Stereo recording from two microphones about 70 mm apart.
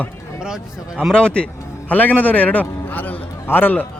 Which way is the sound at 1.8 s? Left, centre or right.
Left.